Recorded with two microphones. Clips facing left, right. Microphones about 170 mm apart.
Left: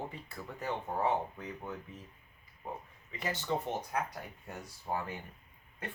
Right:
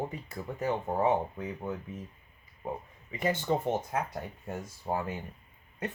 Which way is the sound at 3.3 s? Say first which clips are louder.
Right 4 dB; 50° right (ahead or behind).